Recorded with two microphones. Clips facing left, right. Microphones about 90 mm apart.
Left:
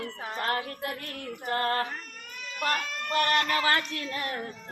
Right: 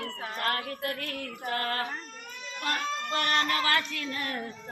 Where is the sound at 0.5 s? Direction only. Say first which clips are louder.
Left 1 dB; 20° left (ahead or behind).